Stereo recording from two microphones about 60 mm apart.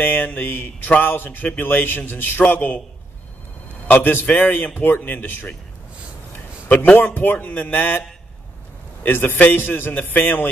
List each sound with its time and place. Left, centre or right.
0.0 s speech: left
3.8 s speech: left
6.3 s a sound: left
7.0 s speech: left
9.0 s speech: left